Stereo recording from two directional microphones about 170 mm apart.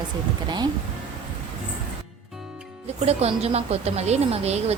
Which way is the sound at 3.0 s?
40° right (ahead or behind).